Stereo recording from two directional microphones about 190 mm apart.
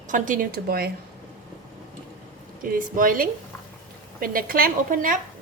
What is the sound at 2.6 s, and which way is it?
A woman's voice, 45° right (ahead or behind).